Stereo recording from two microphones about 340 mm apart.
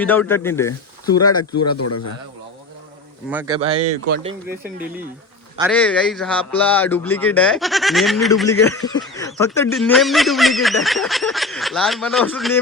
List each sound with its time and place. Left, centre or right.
0.0 s speech: centre
1.5 s speech: left
3.2 s speech: centre
4.4 s speech: right
5.7 s speech: centre
8.4 s speech: centre